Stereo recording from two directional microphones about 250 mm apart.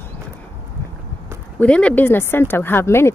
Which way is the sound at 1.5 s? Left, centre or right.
Centre.